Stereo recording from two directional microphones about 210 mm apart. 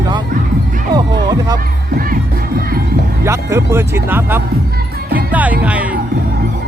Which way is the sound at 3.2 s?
10° right (ahead or behind).